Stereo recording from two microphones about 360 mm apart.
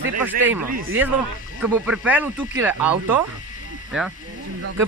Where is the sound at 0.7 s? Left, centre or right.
Right.